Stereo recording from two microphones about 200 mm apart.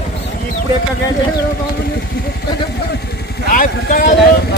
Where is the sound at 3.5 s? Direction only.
40° left (ahead or behind).